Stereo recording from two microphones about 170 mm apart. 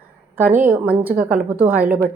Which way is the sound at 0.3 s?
10° right (ahead or behind).